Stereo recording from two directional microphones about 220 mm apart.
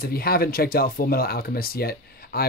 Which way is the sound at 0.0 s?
45° left (ahead or behind).